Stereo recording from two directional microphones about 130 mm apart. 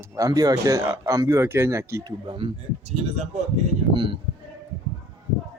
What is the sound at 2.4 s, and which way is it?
Speech, 45° right (ahead or behind).